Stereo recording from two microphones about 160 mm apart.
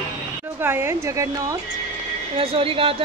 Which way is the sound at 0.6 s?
15° right (ahead or behind).